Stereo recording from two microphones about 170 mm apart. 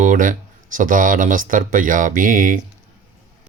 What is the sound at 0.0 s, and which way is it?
Speech, 50° right (ahead or behind).